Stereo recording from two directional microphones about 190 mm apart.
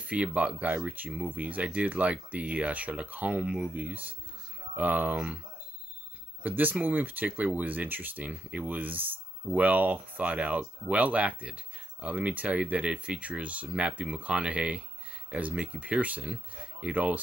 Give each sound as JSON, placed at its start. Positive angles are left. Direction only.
{"t": 0.0, "sound": "speech", "side_deg": -5}
{"t": 6.4, "sound": "speech", "side_deg": -10}